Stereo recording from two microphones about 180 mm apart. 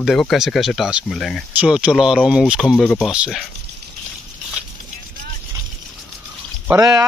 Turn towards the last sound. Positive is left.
turn(degrees=-15)  # may be behind; listen again after turning